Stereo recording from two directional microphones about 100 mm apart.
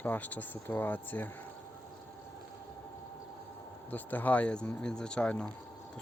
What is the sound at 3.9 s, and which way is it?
Speech, 15° left (ahead or behind).